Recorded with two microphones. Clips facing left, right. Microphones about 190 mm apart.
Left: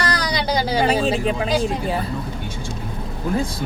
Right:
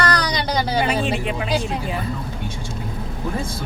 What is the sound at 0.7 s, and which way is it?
Speech, 35° left (ahead or behind).